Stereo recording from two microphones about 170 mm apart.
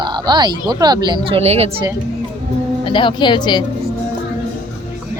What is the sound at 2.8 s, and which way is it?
Speech, 30° left (ahead or behind).